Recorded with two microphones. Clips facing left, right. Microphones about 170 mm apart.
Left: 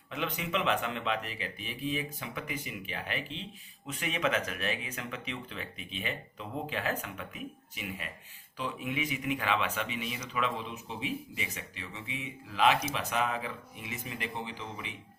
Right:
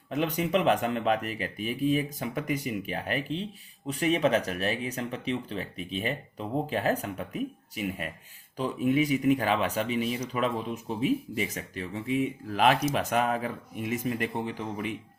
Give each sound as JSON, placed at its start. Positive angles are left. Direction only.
{"t": 0.1, "sound": "speech", "side_deg": -40}